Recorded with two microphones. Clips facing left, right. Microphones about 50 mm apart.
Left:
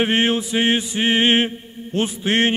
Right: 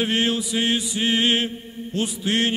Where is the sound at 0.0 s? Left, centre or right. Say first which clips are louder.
Left 4 dB; left.